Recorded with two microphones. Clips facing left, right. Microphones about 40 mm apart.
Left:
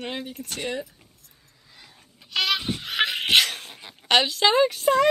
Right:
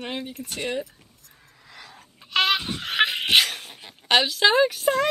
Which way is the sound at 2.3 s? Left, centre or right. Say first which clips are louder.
Right 3 dB; right.